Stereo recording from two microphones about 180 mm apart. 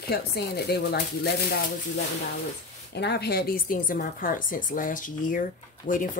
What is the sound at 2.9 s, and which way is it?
Speech, 65° left (ahead or behind).